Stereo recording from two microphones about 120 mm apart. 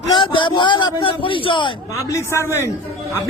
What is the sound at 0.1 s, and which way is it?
A man's voice, 45° left (ahead or behind).